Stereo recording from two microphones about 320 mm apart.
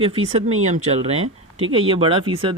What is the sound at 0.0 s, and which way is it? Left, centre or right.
Speech, centre.